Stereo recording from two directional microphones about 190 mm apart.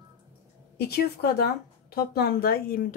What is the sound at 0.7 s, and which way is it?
Speech, 55° left (ahead or behind).